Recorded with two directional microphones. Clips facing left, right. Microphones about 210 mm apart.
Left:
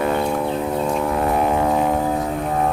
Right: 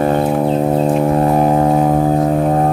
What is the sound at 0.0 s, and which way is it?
Music, 40° right (ahead or behind).